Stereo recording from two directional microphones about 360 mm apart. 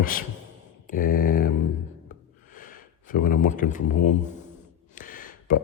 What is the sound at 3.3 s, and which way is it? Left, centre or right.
Speech, left.